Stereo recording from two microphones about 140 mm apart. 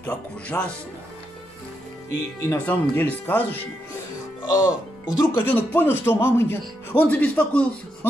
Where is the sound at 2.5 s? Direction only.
10° left (ahead or behind).